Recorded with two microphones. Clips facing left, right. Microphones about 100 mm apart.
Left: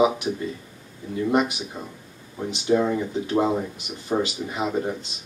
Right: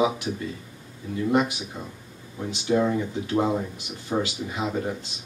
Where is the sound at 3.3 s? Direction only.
20° left (ahead or behind).